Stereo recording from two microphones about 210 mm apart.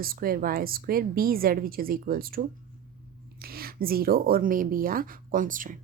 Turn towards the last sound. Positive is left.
turn(degrees=-40)  # may be behind; listen again after turning